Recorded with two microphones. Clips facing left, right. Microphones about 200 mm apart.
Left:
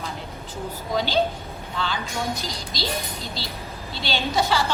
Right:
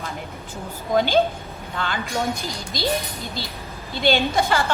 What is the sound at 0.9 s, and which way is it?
Speech, 50° right (ahead or behind).